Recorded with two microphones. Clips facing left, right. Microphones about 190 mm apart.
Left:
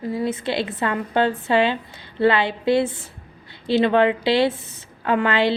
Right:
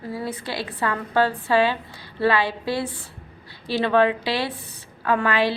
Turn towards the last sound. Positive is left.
turn(degrees=25)  # may be behind; listen again after turning